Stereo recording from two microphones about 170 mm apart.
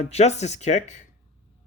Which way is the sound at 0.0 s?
40° left (ahead or behind).